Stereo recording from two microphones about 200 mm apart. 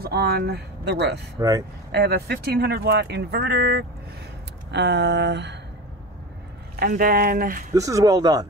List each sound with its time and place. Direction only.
0.0 s speech: 55° right (ahead or behind)
6.8 s speech: 45° right (ahead or behind)
7.7 s speech: 15° right (ahead or behind)